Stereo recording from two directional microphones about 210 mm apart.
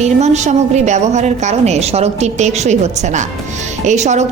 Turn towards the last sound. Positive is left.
turn(degrees=-35)  # may be behind; listen again after turning